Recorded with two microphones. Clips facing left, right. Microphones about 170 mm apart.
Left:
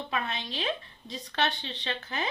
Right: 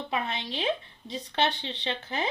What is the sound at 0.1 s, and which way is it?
A woman's voice, 25° right (ahead or behind).